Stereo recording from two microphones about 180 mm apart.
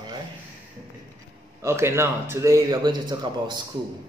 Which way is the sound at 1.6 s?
15° right (ahead or behind).